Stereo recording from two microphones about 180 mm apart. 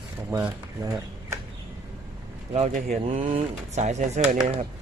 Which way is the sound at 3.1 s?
35° right (ahead or behind).